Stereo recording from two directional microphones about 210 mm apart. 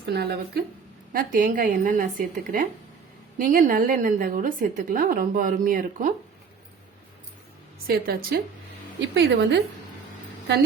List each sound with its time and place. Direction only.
0.1 s a woman's voice: 50° right (ahead or behind)
7.9 s speech: 45° right (ahead or behind)
9.0 s a woman's voice: 55° right (ahead or behind)